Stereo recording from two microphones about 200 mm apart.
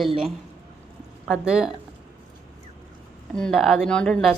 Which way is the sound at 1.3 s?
5° right (ahead or behind).